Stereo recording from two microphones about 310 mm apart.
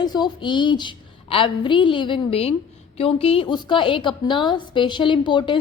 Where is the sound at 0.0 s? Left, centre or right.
Centre.